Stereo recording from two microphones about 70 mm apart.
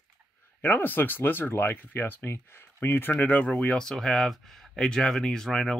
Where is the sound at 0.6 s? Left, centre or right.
Left.